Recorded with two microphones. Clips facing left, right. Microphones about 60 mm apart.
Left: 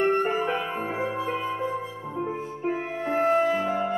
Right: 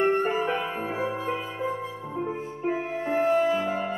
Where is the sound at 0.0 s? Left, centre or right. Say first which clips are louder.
Even; centre.